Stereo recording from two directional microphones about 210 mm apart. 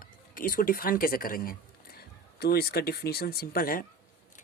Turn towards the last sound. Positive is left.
turn(degrees=45)  # may be behind; listen again after turning